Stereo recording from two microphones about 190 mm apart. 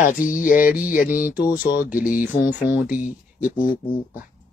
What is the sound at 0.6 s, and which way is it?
Speech, 10° right (ahead or behind).